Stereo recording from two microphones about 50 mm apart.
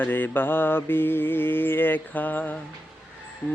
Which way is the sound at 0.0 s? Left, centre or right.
Left.